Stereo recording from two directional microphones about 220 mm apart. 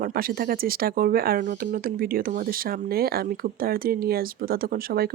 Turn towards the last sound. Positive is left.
turn(degrees=-45)  # may be behind; listen again after turning